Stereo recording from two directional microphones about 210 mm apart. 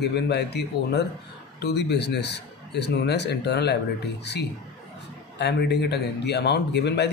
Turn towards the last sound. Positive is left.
turn(degrees=55)  # may be behind; listen again after turning